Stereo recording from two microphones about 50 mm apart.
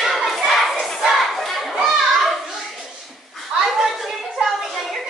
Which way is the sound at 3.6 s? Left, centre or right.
Centre.